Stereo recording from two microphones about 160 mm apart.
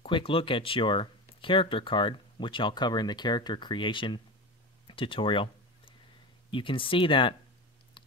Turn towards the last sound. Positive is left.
turn(degrees=30)  # may be behind; listen again after turning